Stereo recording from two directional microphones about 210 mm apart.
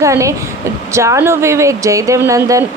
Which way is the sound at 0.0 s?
15° right (ahead or behind).